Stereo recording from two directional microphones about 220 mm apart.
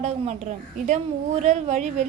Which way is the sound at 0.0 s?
30° right (ahead or behind).